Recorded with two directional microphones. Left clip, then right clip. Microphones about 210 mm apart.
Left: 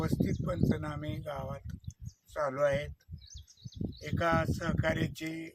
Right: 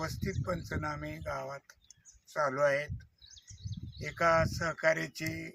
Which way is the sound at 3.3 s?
55° left (ahead or behind).